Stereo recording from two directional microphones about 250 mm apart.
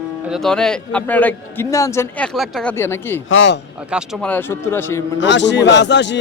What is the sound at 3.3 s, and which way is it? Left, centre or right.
Speech, left.